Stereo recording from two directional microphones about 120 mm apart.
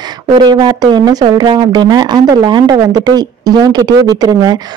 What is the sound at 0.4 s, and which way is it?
Speech, 35° right (ahead or behind).